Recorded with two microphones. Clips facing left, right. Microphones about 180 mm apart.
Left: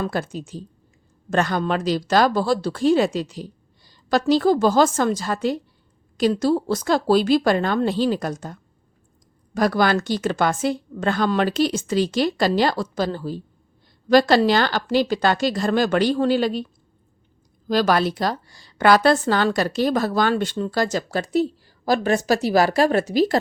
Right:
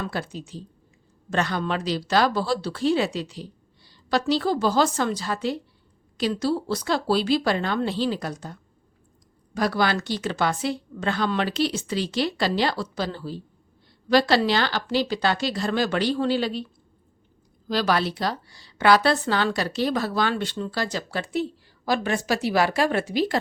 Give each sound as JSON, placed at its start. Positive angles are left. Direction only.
{"t": 0.0, "sound": "a woman's voice", "side_deg": 45}
{"t": 9.6, "sound": "a woman's voice", "side_deg": 50}
{"t": 17.7, "sound": "a woman's voice", "side_deg": 45}